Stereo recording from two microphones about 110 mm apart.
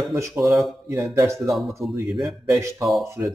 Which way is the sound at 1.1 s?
25° right (ahead or behind).